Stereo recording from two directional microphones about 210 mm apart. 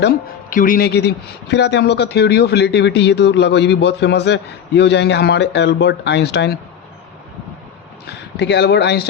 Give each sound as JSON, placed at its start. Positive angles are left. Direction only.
{"t": 0.5, "sound": "speech", "side_deg": 40}
{"t": 8.4, "sound": "speech", "side_deg": 50}